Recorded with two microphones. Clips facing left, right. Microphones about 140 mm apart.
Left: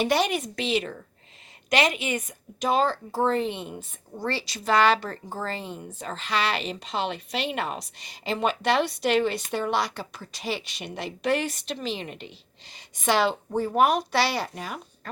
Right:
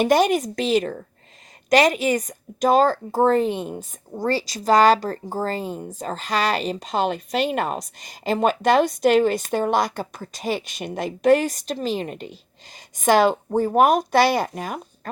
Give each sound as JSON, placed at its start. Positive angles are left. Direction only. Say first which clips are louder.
{"t": 0.0, "sound": "a woman's voice", "louder": "right 6 dB", "side_deg": -45}